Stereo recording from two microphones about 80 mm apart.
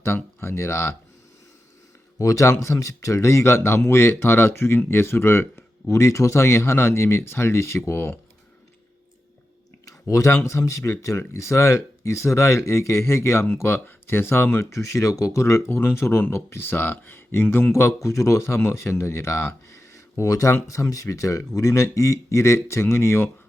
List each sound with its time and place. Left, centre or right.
0.0 s speech: left
2.1 s speech: left
9.8 s a sound: left
10.7 s speech: left